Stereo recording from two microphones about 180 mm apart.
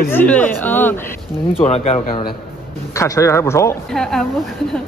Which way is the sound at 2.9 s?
15° left (ahead or behind).